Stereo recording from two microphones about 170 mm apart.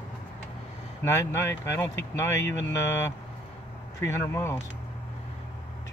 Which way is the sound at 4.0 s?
15° left (ahead or behind).